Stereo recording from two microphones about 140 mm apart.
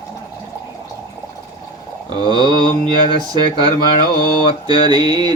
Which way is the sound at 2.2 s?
35° left (ahead or behind).